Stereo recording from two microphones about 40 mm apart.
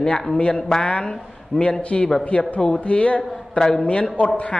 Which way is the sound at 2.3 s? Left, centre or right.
Left.